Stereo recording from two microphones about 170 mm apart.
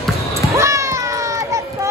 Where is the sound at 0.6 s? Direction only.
15° right (ahead or behind).